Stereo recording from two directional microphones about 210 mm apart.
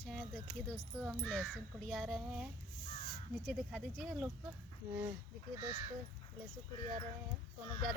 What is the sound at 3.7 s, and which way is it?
Speech, centre (ahead or behind).